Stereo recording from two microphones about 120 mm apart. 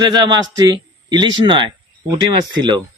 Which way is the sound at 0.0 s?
40° right (ahead or behind).